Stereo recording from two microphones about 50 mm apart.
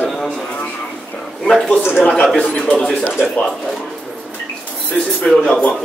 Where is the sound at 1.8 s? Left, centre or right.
Left.